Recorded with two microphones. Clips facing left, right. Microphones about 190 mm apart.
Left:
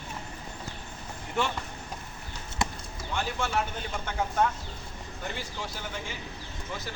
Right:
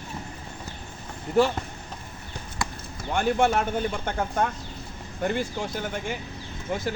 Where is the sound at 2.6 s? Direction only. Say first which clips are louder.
Left 1 dB; 25° left (ahead or behind).